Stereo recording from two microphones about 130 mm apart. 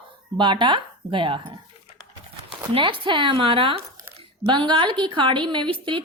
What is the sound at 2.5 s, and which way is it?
A woman's voice, 40° right (ahead or behind).